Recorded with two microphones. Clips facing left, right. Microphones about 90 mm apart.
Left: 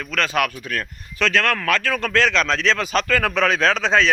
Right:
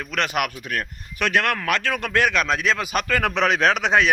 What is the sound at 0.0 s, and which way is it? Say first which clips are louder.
A man's voice: left 2 dB; 20° right (ahead or behind).